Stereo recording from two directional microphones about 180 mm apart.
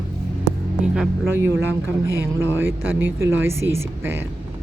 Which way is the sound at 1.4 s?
15° right (ahead or behind).